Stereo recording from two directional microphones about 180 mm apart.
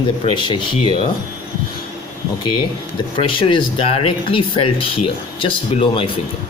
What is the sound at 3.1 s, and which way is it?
Speech, 30° left (ahead or behind).